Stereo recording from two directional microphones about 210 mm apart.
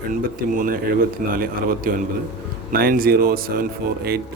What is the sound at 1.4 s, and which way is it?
Speech, 45° right (ahead or behind).